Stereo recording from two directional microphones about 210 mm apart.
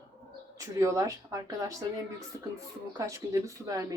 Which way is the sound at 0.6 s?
15° right (ahead or behind).